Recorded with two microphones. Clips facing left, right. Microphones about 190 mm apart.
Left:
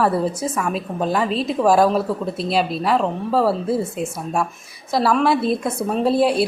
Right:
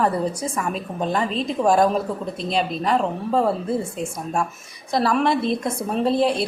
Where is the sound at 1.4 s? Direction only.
5° left (ahead or behind).